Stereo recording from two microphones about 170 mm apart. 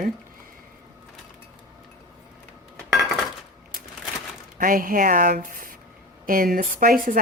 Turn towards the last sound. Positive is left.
turn(degrees=-55)  # may be behind; listen again after turning